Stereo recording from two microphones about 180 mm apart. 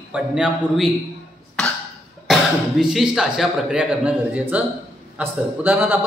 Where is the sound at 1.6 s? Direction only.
5° left (ahead or behind).